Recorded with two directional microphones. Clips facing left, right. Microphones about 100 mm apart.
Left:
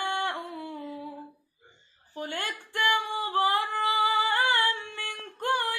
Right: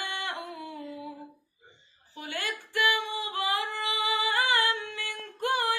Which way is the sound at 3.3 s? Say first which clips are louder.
Left 7 dB; 40° left (ahead or behind).